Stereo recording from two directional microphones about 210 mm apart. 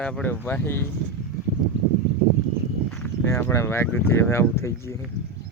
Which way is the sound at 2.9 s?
10° left (ahead or behind).